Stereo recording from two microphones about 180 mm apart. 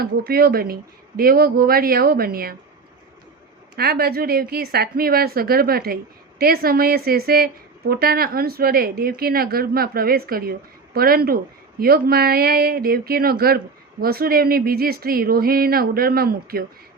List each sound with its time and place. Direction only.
0.0 s a woman's voice: 55° right (ahead or behind)
3.8 s a woman's voice: 60° right (ahead or behind)